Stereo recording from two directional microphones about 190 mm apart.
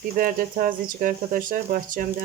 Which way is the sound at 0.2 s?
45° right (ahead or behind).